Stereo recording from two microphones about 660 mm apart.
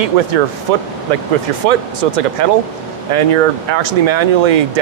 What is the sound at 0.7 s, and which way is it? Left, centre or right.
Speech, right.